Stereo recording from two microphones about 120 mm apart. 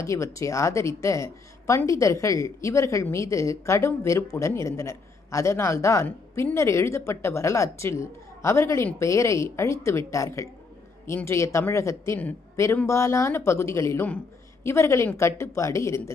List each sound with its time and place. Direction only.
0.0 s a man's voice: 25° left (ahead or behind)